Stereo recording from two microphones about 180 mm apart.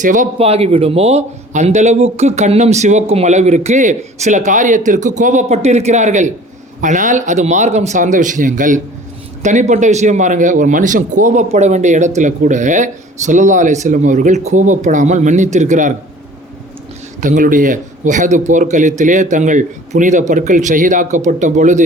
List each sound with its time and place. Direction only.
0.0 s a man's voice: 45° right (ahead or behind)
17.2 s a man's voice: 45° right (ahead or behind)